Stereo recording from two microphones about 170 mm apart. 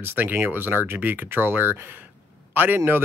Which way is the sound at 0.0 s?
10° right (ahead or behind).